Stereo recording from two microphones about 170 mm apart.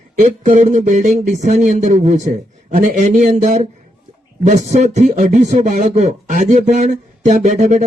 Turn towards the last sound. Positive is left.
turn(degrees=-45)  # may be behind; listen again after turning